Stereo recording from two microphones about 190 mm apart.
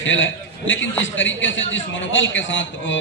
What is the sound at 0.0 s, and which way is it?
A man's voice, 80° left.